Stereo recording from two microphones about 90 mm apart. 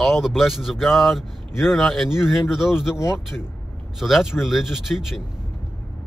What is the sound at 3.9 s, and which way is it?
A man's voice, 5° right (ahead or behind).